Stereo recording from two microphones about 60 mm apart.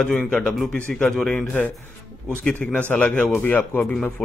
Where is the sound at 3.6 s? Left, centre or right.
Left.